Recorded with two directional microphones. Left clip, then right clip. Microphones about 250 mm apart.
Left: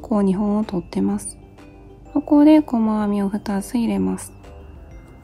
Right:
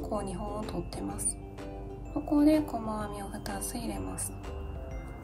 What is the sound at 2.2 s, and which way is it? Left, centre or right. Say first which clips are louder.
Speech: left 12 dB; left.